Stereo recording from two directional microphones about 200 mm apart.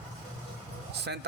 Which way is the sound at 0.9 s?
55° right (ahead or behind).